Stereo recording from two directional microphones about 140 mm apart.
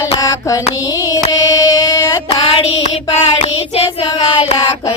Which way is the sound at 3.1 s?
50° left (ahead or behind).